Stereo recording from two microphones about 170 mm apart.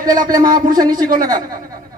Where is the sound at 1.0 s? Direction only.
55° right (ahead or behind).